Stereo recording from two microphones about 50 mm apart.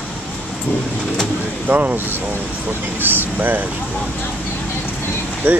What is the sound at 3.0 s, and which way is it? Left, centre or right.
Speech, right.